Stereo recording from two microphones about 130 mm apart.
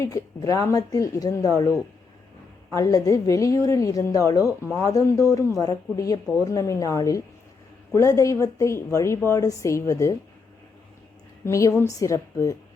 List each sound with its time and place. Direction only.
0.0 s a woman's voice: 25° left (ahead or behind)
11.4 s a woman's voice: 20° left (ahead or behind)